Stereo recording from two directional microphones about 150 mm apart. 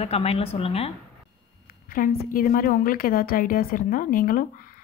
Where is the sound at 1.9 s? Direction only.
70° left (ahead or behind).